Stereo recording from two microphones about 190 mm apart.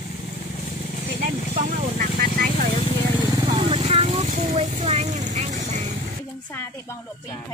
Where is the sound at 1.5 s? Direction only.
45° right (ahead or behind).